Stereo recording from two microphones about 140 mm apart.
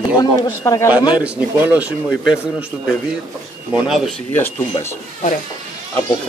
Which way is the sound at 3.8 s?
Centre (ahead or behind).